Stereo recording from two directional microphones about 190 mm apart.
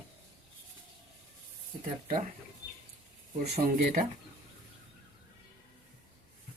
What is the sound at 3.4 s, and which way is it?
Speech, 40° right (ahead or behind).